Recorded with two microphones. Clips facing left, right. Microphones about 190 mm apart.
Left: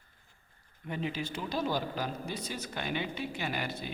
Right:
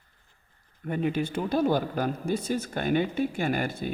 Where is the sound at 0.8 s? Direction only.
50° right (ahead or behind).